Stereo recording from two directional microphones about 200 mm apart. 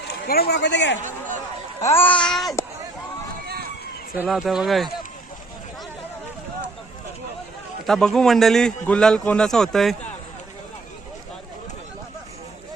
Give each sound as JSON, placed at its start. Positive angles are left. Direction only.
{"t": 0.3, "sound": "a man's voice", "side_deg": 50}
{"t": 1.8, "sound": "a man's voice", "side_deg": 10}
{"t": 3.4, "sound": "run", "side_deg": -50}
{"t": 4.2, "sound": "a man's voice", "side_deg": 0}
{"t": 7.9, "sound": "a man's voice", "side_deg": 5}